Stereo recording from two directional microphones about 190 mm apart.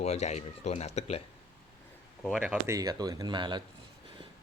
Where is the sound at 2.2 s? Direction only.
Centre (ahead or behind).